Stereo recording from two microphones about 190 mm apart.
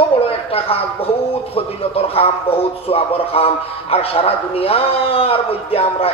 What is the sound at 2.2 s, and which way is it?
A man's voice, 30° left (ahead or behind).